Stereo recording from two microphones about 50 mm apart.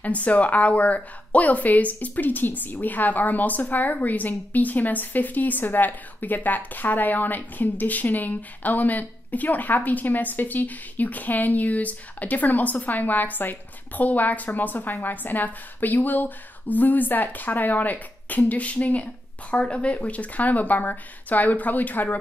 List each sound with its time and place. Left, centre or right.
0.0 s speech: left